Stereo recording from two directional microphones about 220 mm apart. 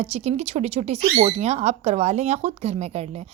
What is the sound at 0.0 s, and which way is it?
Speech, 30° right (ahead or behind).